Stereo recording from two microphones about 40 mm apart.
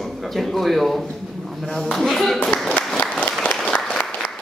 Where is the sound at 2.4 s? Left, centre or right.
Left.